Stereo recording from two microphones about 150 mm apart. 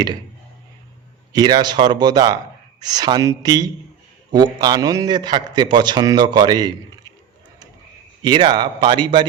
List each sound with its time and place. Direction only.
1.3 s a man's voice: 25° right (ahead or behind)
8.2 s a man's voice: 30° right (ahead or behind)